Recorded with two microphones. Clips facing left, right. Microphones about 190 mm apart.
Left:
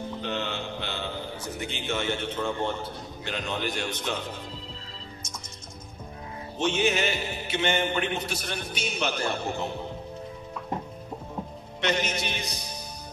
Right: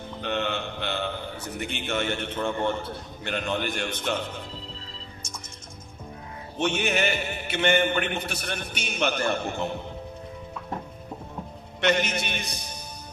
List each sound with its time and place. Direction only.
0.2 s mantra: 60° right (ahead or behind)
1.6 s music: 60° right (ahead or behind)
6.6 s music: 60° right (ahead or behind)
11.8 s music: 55° right (ahead or behind)